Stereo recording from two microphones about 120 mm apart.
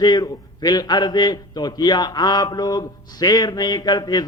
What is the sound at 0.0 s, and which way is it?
A man's voice, 35° left (ahead or behind).